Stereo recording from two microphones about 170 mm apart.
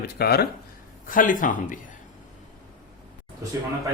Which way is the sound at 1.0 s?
50° left (ahead or behind).